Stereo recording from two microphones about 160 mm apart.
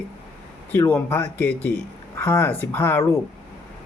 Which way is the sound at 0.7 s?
15° left (ahead or behind).